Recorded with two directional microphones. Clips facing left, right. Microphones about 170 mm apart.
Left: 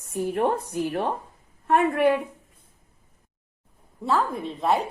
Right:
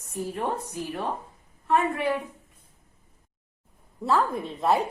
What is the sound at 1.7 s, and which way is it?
Speech, 60° left (ahead or behind).